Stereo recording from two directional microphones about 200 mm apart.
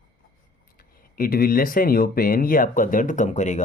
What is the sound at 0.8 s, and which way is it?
Speech, 45° left (ahead or behind).